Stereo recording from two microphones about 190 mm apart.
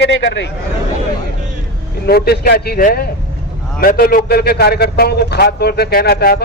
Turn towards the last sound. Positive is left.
turn(degrees=55)  # may be behind; listen again after turning